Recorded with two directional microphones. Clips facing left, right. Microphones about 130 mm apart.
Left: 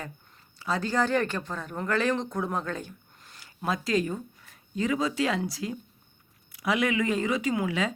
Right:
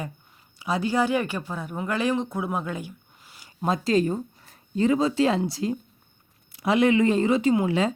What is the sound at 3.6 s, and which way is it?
Speech, 25° right (ahead or behind).